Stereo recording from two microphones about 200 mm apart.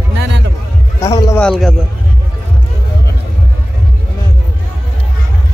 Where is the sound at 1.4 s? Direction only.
Centre (ahead or behind).